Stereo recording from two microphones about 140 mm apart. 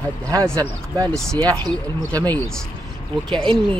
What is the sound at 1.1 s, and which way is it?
Speech, 5° left (ahead or behind).